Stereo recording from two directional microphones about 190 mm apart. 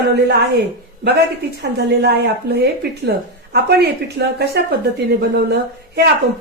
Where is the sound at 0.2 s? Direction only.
60° right (ahead or behind).